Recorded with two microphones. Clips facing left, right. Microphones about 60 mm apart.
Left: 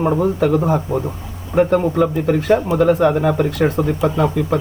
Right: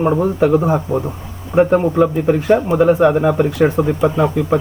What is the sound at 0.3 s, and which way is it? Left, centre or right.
Speech, right.